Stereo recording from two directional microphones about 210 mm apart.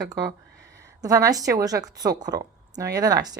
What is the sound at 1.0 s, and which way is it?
A woman's voice, 15° right (ahead or behind).